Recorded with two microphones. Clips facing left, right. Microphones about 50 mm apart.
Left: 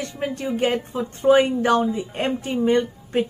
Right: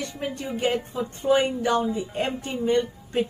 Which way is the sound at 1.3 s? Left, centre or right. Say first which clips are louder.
Left 5 dB; left.